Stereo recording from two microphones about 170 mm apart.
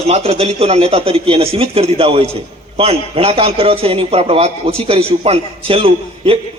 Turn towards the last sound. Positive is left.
turn(degrees=-35)  # may be behind; listen again after turning